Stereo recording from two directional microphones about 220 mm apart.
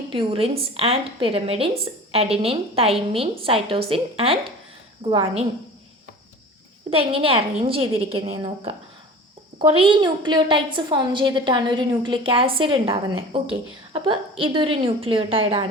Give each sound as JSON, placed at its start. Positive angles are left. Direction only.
{"t": 0.1, "sound": "a woman's voice", "side_deg": -25}
{"t": 6.9, "sound": "a woman's voice", "side_deg": -25}